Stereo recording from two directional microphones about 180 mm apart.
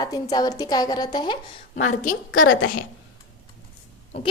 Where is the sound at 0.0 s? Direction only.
20° left (ahead or behind).